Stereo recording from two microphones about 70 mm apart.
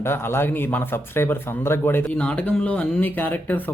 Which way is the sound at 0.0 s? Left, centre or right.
Left.